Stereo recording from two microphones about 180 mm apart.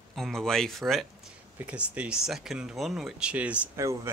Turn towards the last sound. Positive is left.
turn(degrees=-10)  # may be behind; listen again after turning